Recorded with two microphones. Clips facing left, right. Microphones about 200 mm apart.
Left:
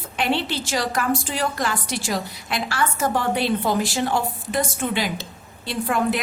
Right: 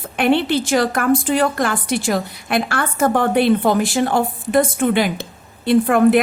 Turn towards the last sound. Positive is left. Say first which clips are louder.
# right 10 dB
turn(degrees=-55)  # may be behind; listen again after turning